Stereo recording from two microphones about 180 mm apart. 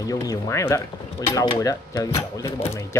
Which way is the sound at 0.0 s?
20° left (ahead or behind).